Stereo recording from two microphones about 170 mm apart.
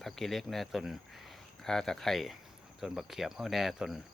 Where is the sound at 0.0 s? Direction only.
Centre (ahead or behind).